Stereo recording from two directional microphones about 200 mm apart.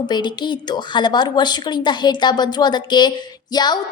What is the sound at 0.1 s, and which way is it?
A woman's voice, 20° left (ahead or behind).